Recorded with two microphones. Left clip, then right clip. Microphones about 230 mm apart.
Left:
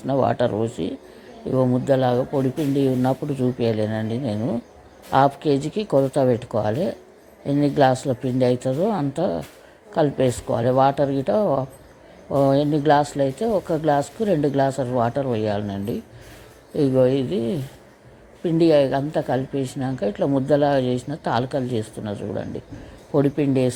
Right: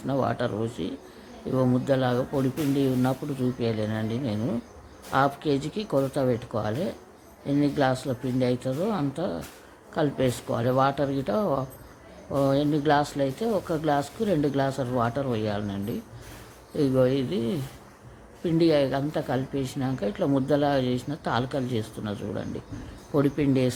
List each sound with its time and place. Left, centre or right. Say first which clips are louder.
0.1 s speech: left 7 dB; centre